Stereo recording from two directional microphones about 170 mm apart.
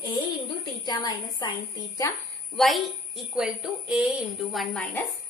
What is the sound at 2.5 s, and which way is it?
A woman's voice, centre (ahead or behind).